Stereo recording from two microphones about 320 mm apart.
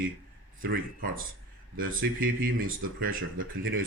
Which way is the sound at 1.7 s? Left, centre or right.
Right.